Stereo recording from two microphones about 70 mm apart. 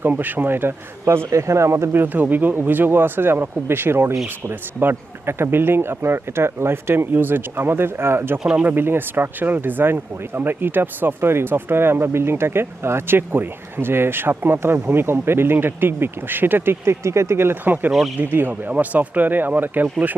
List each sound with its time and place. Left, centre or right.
0.0 s speech: right
1.9 s speech: right
8.4 s speech: centre
8.7 s speech: right